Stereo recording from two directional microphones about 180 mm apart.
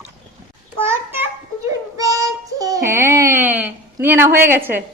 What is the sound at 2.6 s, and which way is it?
A woman's voice, 15° right (ahead or behind).